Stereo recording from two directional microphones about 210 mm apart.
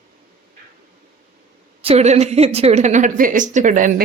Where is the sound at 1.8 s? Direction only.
30° right (ahead or behind).